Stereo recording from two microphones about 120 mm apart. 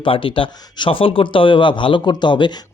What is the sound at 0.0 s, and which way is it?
Speech, 50° left (ahead or behind).